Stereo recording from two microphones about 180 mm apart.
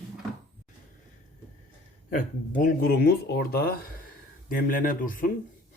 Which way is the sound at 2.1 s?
45° left (ahead or behind).